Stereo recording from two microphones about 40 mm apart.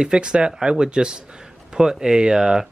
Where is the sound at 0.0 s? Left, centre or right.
Right.